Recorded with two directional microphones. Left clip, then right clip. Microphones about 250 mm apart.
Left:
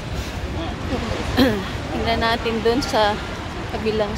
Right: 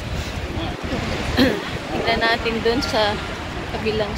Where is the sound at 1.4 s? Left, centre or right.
Centre.